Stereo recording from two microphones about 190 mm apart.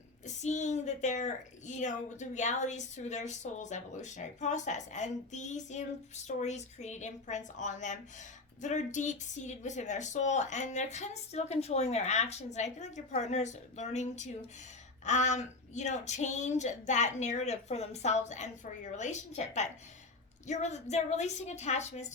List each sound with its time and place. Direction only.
0.3 s a woman's voice: 40° left (ahead or behind)